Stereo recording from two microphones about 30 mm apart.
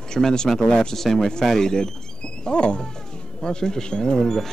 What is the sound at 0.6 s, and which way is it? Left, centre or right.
Speech, left.